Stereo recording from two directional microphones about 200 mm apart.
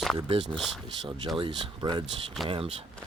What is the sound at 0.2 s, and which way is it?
A man's voice, 25° right (ahead or behind).